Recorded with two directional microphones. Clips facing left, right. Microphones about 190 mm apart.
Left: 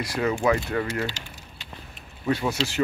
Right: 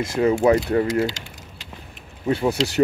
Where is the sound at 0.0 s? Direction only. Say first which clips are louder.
Right 6 dB; 25° right (ahead or behind).